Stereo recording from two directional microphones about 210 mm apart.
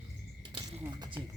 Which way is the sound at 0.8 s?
20° right (ahead or behind).